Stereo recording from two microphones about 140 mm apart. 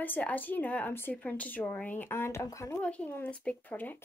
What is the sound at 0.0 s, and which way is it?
Speech, 10° left (ahead or behind).